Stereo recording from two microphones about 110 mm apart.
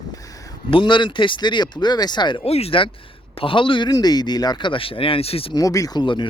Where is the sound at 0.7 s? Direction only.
45° left (ahead or behind).